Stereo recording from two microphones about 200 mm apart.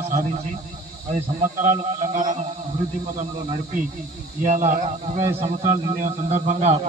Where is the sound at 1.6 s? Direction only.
40° right (ahead or behind).